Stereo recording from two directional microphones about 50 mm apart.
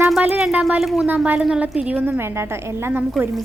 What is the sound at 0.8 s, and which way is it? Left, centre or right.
Speech, centre.